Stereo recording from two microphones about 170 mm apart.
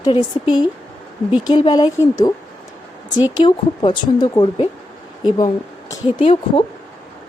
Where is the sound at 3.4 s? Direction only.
30° left (ahead or behind).